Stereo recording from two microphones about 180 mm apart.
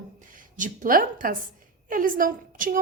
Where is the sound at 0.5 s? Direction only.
45° right (ahead or behind).